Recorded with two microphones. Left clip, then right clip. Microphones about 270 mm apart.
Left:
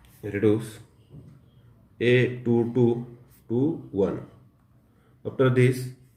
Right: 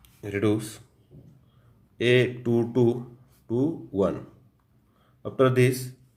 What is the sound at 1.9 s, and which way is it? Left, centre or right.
Speech, right.